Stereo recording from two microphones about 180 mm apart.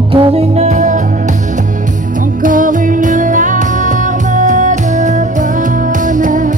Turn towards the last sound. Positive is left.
turn(degrees=-45)  # may be behind; listen again after turning